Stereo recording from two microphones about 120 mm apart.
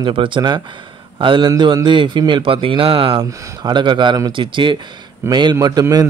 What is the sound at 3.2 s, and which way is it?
Speech, 30° right (ahead or behind).